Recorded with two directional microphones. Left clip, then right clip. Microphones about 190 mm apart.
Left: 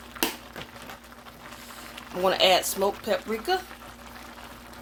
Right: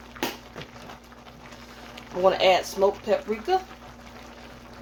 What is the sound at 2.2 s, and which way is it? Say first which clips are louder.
Speech: right 1 dB; 35° left (ahead or behind).